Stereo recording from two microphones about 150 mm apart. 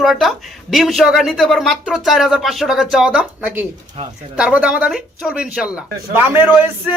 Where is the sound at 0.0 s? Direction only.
Centre (ahead or behind).